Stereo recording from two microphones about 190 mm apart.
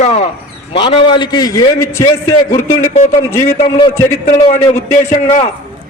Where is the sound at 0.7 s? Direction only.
25° left (ahead or behind).